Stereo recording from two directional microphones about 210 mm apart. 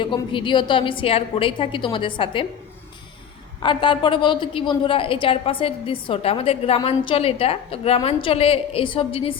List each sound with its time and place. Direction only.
0.0 s a woman's voice: 25° left (ahead or behind)
3.6 s a woman's voice: 25° left (ahead or behind)